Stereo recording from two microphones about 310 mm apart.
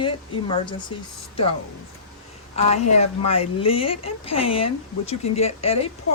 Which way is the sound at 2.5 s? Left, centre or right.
Centre.